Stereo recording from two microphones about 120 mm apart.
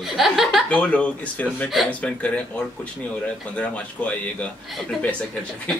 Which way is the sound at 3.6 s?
10° left (ahead or behind).